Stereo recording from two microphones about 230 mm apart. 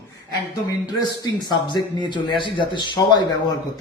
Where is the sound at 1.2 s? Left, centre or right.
Centre.